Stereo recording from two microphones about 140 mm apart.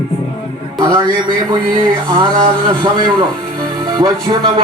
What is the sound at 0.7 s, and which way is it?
Speech, 30° right (ahead or behind).